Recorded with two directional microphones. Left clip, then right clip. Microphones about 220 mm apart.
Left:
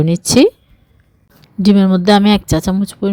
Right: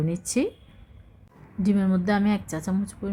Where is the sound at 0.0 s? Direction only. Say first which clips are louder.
Left 16 dB; 35° left (ahead or behind).